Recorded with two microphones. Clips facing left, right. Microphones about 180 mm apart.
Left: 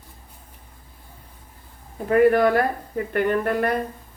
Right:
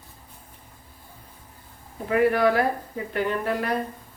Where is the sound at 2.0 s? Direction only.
45° left (ahead or behind).